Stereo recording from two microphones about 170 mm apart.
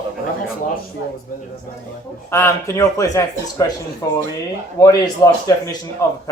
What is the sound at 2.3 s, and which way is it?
Speech, 15° left (ahead or behind).